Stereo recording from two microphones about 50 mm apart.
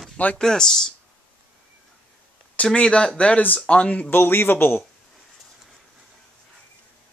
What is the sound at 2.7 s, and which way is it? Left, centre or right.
Speech, centre.